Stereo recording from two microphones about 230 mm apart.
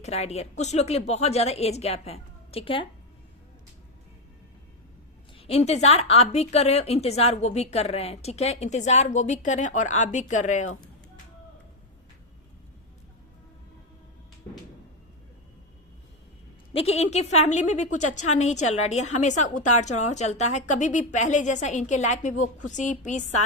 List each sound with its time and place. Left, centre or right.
0.0 s a woman's voice: left
5.4 s a woman's voice: left
16.7 s a woman's voice: left